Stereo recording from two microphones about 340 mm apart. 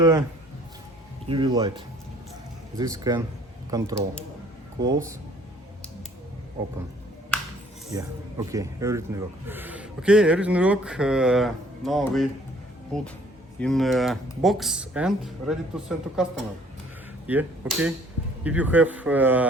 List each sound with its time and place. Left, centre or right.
0.0 s speech: centre
1.3 s speech: centre
7.9 s speech: centre
17.3 s speech: centre